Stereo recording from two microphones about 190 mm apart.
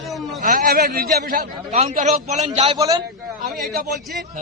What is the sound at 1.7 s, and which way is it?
Speech, 35° right (ahead or behind).